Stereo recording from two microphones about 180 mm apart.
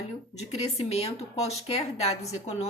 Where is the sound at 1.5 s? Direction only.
35° left (ahead or behind).